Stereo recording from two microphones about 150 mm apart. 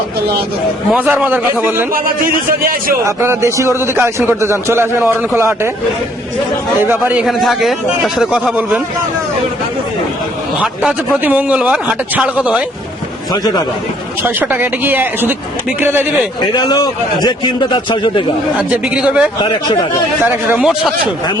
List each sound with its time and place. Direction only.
0.9 s a man's voice: 10° right (ahead or behind)
1.9 s a man's voice: 70° right (ahead or behind)
3.0 s a man's voice: 15° right (ahead or behind)
6.8 s a man's voice: 15° right (ahead or behind)
10.6 s a man's voice: 5° right (ahead or behind)
13.3 s a man's voice: 25° left (ahead or behind)
14.3 s a man's voice: 15° right (ahead or behind)
16.6 s a man's voice: 25° left (ahead or behind)
18.5 s a man's voice: 5° right (ahead or behind)
19.4 s speech: 35° left (ahead or behind)
20.2 s a man's voice: 10° right (ahead or behind)